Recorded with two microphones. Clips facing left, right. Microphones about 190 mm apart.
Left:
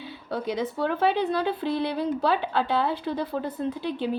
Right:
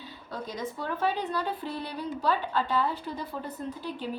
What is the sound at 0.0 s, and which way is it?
Speech, 70° left (ahead or behind).